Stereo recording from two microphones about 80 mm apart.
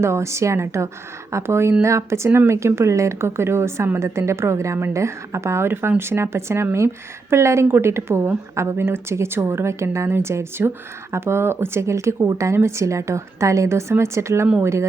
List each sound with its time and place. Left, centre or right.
0.0 s a woman's voice: right